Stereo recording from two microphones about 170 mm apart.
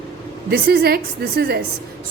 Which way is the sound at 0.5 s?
65° right (ahead or behind).